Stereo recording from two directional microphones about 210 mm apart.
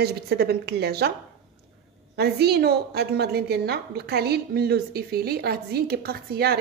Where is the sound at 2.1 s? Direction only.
50° right (ahead or behind).